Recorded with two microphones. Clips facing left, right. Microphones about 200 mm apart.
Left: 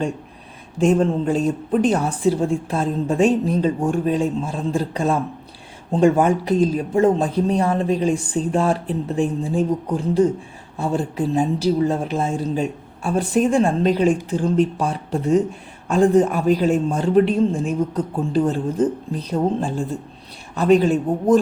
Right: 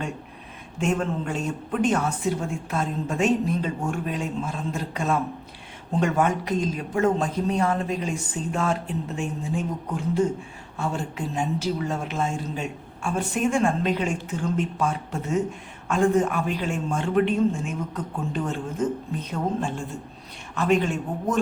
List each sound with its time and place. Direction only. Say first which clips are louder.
0.8 s speech: left 8 dB; 35° left (ahead or behind)